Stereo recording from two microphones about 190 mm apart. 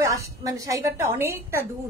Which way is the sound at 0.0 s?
15° right (ahead or behind).